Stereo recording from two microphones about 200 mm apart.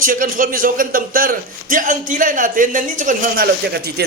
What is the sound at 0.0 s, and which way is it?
A man's voice, 45° right (ahead or behind).